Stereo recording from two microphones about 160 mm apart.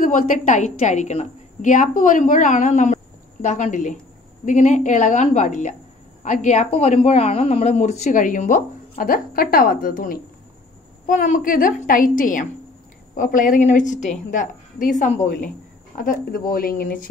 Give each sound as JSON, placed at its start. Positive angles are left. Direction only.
{"t": 0.0, "sound": "a woman's voice", "side_deg": 55}
{"t": 16.0, "sound": "a woman's voice", "side_deg": 65}